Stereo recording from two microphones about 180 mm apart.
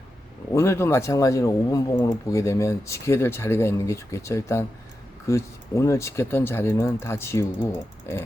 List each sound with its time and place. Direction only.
0.5 s speech: 15° left (ahead or behind)